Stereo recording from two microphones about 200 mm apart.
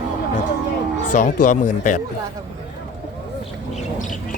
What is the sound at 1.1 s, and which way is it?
Speech, 40° left (ahead or behind).